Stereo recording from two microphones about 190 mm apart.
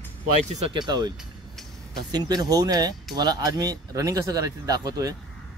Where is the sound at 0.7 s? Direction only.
25° right (ahead or behind).